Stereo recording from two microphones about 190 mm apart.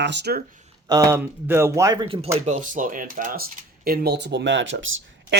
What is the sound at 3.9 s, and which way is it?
Speech, 60° right (ahead or behind).